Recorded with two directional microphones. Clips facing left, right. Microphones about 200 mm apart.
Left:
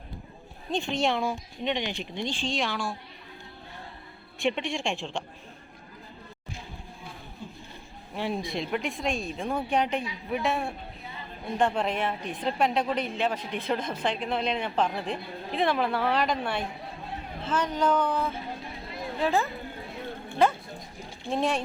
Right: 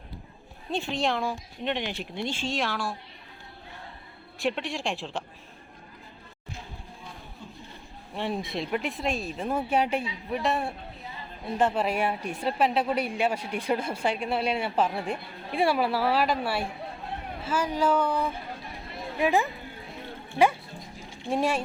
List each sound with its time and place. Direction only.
0.7 s speech: 5° right (ahead or behind)
4.4 s speech: centre (ahead or behind)
8.1 s a woman's voice: centre (ahead or behind); by 19.5 s 15° right (ahead or behind)
21.2 s a woman's voice: 10° right (ahead or behind)